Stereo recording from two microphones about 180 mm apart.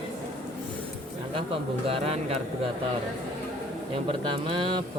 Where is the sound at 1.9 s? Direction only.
35° right (ahead or behind).